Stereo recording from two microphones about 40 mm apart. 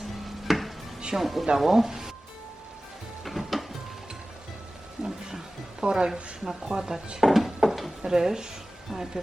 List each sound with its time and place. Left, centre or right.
0.4 s stir: centre
1.1 s speech: centre
3.2 s music: centre
5.0 s music: centre
5.8 s a woman's voice: right
6.7 s speech: centre
7.2 s a sound: centre
8.0 s speech: centre